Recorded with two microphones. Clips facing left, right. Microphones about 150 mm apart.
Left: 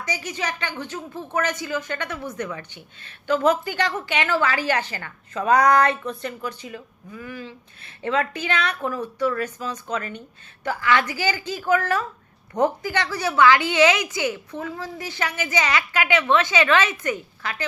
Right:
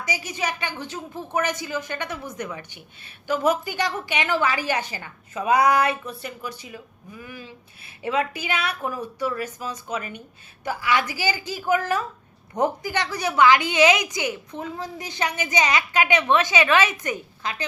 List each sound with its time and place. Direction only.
0.0 s a woman's voice: 10° right (ahead or behind)